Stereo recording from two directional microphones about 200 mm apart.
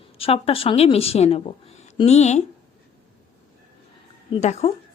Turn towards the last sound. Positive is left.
turn(degrees=35)  # may be behind; listen again after turning